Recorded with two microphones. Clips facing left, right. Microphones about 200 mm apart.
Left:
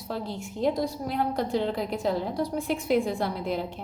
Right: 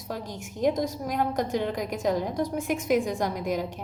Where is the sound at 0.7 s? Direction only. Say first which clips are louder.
Right 1 dB; 45° right (ahead or behind).